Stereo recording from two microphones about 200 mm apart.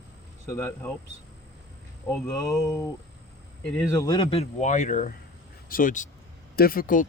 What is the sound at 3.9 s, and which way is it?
Speech, 20° left (ahead or behind).